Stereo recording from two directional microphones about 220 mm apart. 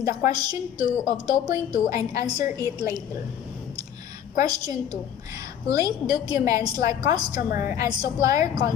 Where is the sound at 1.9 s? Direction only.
15° right (ahead or behind).